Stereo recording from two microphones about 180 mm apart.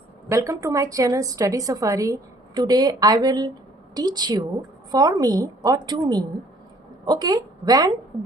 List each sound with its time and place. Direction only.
0.3 s a woman's voice: 15° right (ahead or behind)